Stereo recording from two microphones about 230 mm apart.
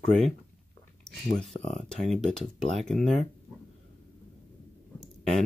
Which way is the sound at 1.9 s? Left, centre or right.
Centre.